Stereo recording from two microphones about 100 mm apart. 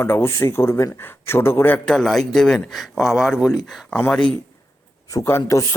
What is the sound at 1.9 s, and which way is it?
Speech, 5° left (ahead or behind).